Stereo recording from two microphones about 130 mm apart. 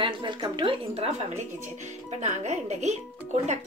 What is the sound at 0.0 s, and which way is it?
Speech, 40° right (ahead or behind).